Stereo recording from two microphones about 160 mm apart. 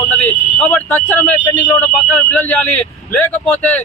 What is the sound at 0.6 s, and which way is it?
Speech, 10° left (ahead or behind).